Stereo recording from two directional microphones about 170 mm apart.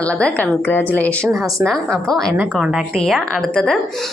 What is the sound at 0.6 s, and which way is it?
Speech, 15° left (ahead or behind).